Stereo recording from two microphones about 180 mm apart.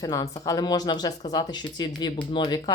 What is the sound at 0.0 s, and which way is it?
Speech, 20° left (ahead or behind).